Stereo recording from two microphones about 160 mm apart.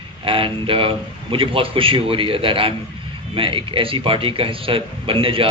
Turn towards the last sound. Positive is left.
turn(degrees=-35)  # may be behind; listen again after turning